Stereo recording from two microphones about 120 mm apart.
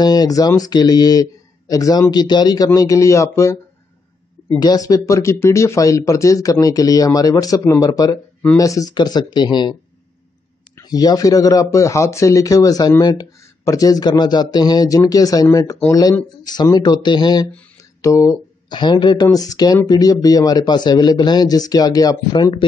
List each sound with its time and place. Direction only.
0.0 s speech: 35° left (ahead or behind)
4.6 s speech: 35° left (ahead or behind)
10.8 s speech: 35° left (ahead or behind)
18.0 s speech: 25° left (ahead or behind)
18.7 s speech: 40° left (ahead or behind)